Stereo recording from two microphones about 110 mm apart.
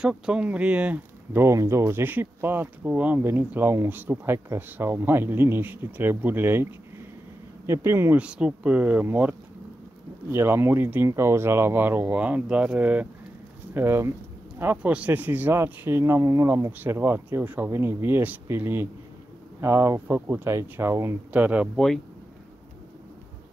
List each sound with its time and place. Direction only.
0.0 s speech: 5° right (ahead or behind); by 8.2 s 25° right (ahead or behind)
8.2 s speech: 10° right (ahead or behind)
10.3 s speech: 20° right (ahead or behind)
21.3 s speech: 15° right (ahead or behind)
21.7 s speech: 5° left (ahead or behind)